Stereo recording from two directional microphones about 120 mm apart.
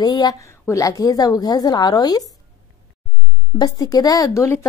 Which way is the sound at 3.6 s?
30° left (ahead or behind).